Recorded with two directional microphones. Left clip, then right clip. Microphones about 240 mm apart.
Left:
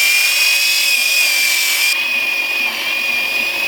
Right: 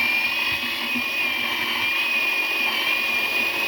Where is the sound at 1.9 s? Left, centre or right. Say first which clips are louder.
Left 5 dB; centre.